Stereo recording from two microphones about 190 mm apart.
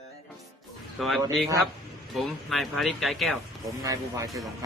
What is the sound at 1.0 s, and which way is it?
A man's voice, centre (ahead or behind).